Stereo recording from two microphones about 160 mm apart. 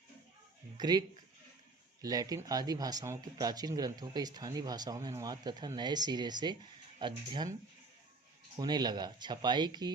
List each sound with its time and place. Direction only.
0.8 s speech: 25° right (ahead or behind)
8.5 s speech: 25° right (ahead or behind)